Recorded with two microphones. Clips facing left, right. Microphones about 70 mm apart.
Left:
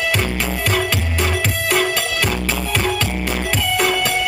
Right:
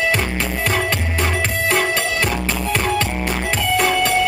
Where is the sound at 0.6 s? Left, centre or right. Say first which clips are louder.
Even; right.